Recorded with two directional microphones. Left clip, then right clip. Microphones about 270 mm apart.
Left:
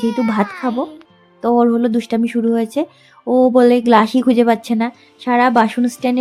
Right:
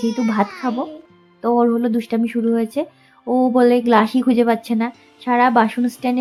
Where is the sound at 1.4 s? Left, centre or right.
Left.